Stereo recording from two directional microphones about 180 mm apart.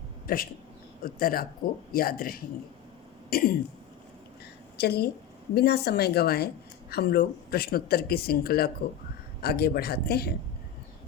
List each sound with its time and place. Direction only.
0.3 s a man's voice: 55° left (ahead or behind)
3.2 s throat clearing: 55° left (ahead or behind)
4.8 s speech: 65° left (ahead or behind)